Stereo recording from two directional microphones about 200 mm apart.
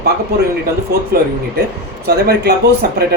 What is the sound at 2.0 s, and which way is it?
Speech, 55° right (ahead or behind).